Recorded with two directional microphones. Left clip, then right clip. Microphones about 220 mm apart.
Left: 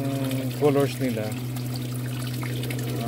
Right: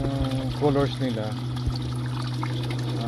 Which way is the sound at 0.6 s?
15° left (ahead or behind).